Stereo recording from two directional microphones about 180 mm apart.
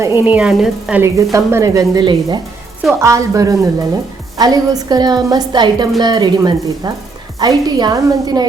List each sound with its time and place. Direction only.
0.3 s a woman's voice: 5° right (ahead or behind); by 8.4 s 20° right (ahead or behind)